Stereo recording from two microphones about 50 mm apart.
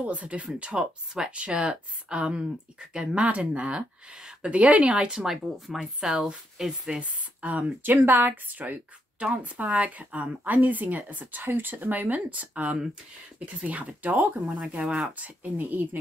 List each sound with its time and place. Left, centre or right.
0.0 s speech: right
1.1 s speech: centre
4.9 s speech: centre
7.0 s speech: right
7.8 s speech: right
11.4 s speech: right